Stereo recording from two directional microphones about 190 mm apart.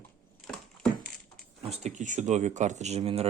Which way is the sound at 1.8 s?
40° right (ahead or behind).